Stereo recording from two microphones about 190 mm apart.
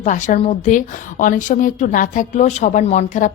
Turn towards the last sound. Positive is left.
turn(degrees=40)  # may be behind; listen again after turning